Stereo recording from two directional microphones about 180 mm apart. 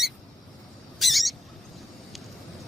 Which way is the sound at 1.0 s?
Centre (ahead or behind).